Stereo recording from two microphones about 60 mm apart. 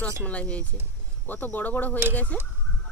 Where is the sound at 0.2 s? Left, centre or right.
Left.